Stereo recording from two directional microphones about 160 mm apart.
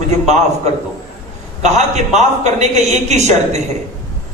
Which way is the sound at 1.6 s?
45° right (ahead or behind).